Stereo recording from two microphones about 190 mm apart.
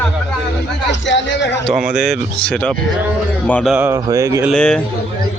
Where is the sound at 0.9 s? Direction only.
70° left (ahead or behind).